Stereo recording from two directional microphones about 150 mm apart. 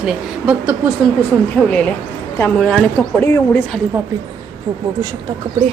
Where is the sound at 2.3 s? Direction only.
10° left (ahead or behind).